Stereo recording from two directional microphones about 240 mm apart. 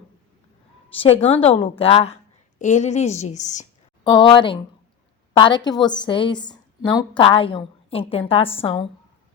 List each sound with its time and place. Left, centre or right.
0.9 s a woman's voice: left
4.0 s a woman's voice: centre